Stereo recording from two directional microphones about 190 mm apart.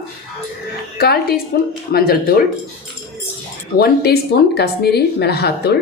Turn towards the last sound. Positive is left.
turn(degrees=60)  # may be behind; listen again after turning